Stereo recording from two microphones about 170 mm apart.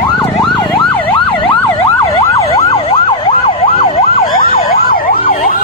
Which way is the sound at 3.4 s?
35° left (ahead or behind).